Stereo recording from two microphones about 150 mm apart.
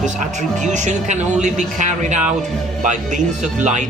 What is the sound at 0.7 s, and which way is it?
Speech, 50° right (ahead or behind).